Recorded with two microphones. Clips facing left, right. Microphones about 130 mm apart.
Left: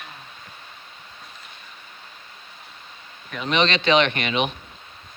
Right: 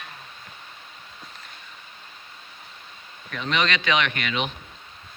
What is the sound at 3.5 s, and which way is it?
Speech, 25° left (ahead or behind).